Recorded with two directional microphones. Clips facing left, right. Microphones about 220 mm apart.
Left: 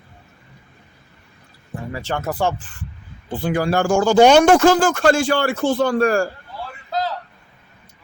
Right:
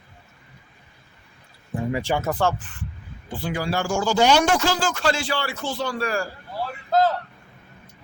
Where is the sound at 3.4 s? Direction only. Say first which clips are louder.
Left 7 dB; 55° left (ahead or behind).